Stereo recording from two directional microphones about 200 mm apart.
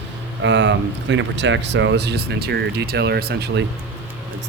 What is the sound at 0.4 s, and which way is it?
Speech, 65° right (ahead or behind).